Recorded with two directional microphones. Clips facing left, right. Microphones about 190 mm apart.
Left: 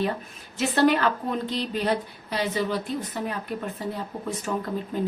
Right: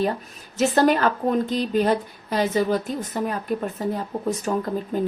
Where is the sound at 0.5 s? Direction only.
45° right (ahead or behind).